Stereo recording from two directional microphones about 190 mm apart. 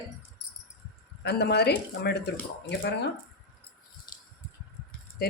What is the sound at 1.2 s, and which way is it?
Speech, 60° left (ahead or behind).